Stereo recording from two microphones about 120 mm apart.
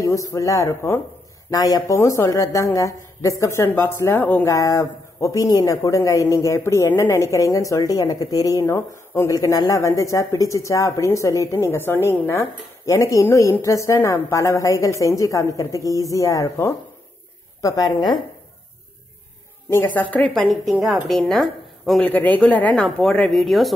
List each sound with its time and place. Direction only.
0.0 s speech: 25° left (ahead or behind)
4.5 s a woman's voice: 25° left (ahead or behind)
19.7 s a woman's voice: 15° left (ahead or behind)
22.0 s a woman's voice: 15° left (ahead or behind)